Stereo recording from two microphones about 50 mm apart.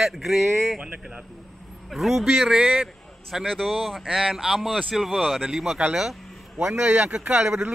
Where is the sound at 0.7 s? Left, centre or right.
Centre.